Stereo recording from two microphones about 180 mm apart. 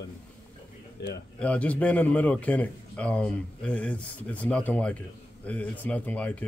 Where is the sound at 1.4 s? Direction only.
10° left (ahead or behind).